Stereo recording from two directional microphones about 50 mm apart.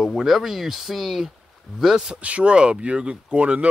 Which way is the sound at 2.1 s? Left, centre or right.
Right.